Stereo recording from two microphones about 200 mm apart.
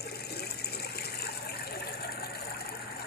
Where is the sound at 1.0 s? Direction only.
50° left (ahead or behind).